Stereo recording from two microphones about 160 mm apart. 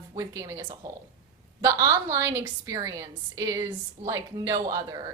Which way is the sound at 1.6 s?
20° right (ahead or behind).